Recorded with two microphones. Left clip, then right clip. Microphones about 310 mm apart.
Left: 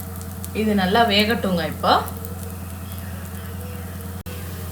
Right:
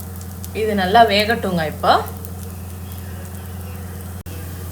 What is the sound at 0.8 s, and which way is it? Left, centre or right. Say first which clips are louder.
A woman's voice: right 5 dB; right.